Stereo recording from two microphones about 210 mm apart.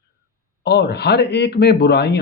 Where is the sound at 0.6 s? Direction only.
50° left (ahead or behind).